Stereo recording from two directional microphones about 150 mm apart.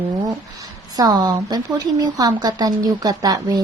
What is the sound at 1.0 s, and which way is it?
A woman's voice, 25° right (ahead or behind).